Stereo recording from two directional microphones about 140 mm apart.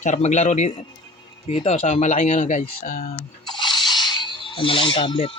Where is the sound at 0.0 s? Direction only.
55° left (ahead or behind).